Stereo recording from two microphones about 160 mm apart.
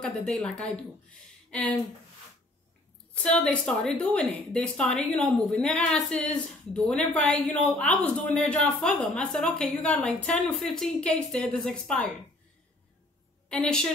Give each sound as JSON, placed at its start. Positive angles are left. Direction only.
{"t": 0.0, "sound": "a woman's voice", "side_deg": 5}
{"t": 3.2, "sound": "a woman's voice", "side_deg": 5}
{"t": 13.5, "sound": "a woman's voice", "side_deg": 5}